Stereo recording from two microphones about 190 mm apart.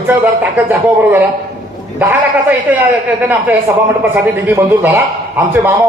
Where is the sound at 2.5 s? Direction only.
10° right (ahead or behind).